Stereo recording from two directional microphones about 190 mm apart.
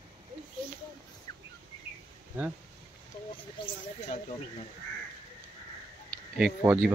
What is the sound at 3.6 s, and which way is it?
Snake, 25° left (ahead or behind).